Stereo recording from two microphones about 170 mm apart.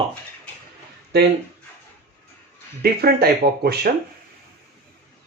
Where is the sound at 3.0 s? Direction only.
65° right (ahead or behind).